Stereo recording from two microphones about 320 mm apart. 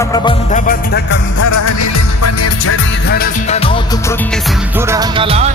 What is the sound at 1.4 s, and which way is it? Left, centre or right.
Music, left.